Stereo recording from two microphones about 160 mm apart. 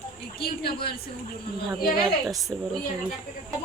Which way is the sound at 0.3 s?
80° left.